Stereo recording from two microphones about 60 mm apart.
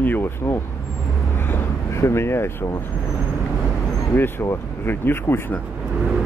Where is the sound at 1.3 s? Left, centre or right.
Left.